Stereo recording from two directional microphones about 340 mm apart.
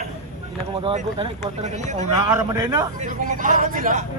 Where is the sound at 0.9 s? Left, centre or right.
Centre.